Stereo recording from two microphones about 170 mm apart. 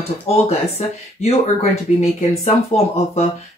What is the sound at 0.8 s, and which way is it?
Speech, 45° left (ahead or behind).